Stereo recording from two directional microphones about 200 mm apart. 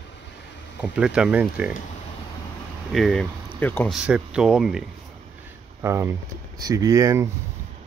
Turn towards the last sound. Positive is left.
turn(degrees=-15)  # may be behind; listen again after turning